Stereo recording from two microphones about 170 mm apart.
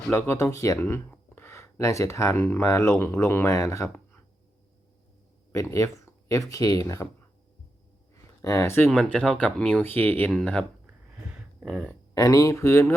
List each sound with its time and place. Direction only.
0.0 s speech: 15° left (ahead or behind)
5.5 s speech: 15° left (ahead or behind)
8.1 s speech: 15° left (ahead or behind)
11.3 s a sound: 5° right (ahead or behind)
12.1 s speech: 20° left (ahead or behind)